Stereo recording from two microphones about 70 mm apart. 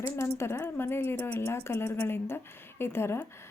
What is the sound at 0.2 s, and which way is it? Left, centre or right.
A woman's voice, left.